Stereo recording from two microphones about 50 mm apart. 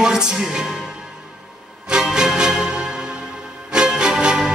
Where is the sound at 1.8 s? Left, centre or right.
Centre.